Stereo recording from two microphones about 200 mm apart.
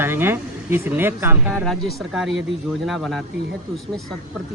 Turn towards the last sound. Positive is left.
turn(degrees=0)  # may be behind; listen again after turning